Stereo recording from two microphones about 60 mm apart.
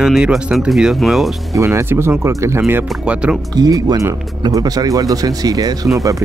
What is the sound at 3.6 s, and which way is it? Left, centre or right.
Speech, right.